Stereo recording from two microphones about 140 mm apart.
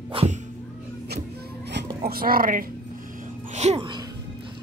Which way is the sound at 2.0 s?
90° right.